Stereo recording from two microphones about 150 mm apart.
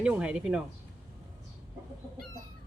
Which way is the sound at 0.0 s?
10° right (ahead or behind).